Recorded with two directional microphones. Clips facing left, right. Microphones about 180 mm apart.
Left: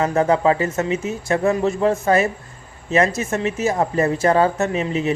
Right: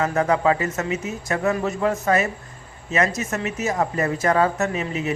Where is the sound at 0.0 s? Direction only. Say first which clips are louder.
Left 3 dB; 30° left (ahead or behind).